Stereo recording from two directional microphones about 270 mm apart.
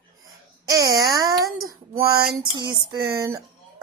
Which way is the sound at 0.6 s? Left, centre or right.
Centre.